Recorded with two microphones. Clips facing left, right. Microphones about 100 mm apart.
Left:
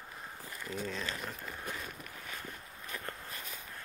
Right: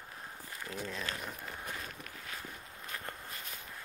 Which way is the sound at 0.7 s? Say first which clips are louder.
Left 2 dB; centre (ahead or behind).